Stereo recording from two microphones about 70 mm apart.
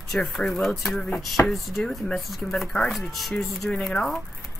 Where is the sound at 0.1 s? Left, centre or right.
Centre.